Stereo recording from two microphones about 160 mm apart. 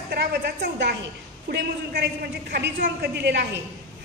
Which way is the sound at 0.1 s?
90° right.